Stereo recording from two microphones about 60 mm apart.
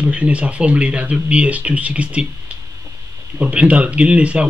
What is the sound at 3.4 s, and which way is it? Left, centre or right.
Speech, right.